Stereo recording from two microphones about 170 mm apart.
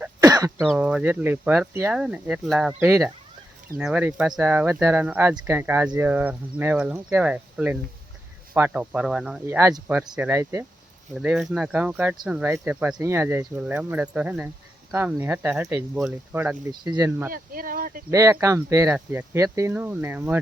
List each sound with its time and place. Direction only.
0.0 s throat clearing: 20° right (ahead or behind)
0.6 s speech: 5° right (ahead or behind)
3.8 s speech: 5° right (ahead or behind)
9.6 s speech: 20° right (ahead or behind)
11.1 s speech: 5° right (ahead or behind)
16.8 s speech: 25° right (ahead or behind)
17.3 s speech: 55° right (ahead or behind)
18.1 s speech: 20° right (ahead or behind)
18.9 s speech: 5° right (ahead or behind)
19.3 s speech: 15° right (ahead or behind)